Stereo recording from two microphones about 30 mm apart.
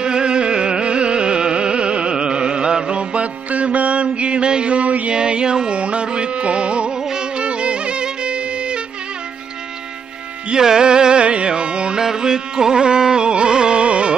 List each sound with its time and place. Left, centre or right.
0.0 s carnatic music: right
3.4 s music: right
4.7 s music: right
5.1 s carnatic music: right
5.8 s carnatic music: right
7.3 s music: right
10.5 s music: right
11.2 s carnatic music: right
12.0 s carnatic music: right
13.8 s music: right